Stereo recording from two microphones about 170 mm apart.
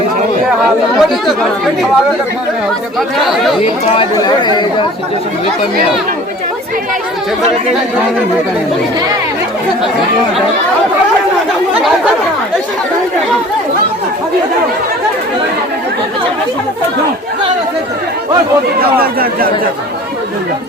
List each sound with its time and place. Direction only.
0.6 s speech: centre (ahead or behind)
3.2 s speech: centre (ahead or behind)
3.9 s speech: 25° left (ahead or behind)
18.8 s speech: 60° right (ahead or behind)